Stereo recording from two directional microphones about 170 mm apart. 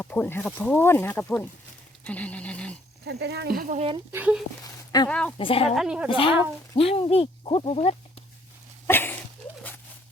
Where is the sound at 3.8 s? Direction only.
30° right (ahead or behind).